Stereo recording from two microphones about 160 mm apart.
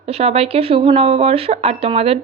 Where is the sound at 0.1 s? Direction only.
40° right (ahead or behind).